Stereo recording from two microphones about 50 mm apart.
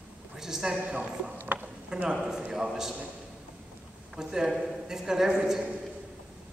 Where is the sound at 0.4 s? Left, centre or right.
Centre.